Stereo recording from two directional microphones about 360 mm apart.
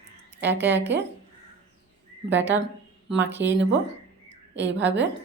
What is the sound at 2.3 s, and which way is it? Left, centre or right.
A woman's voice, right.